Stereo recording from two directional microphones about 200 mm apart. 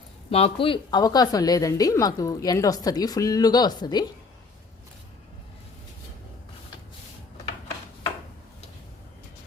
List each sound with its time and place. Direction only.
0.3 s a woman's voice: 30° left (ahead or behind)